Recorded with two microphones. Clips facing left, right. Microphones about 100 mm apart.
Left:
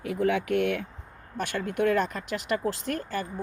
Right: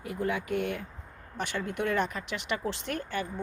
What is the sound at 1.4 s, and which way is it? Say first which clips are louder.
Speech: left 4 dB; 50° left (ahead or behind).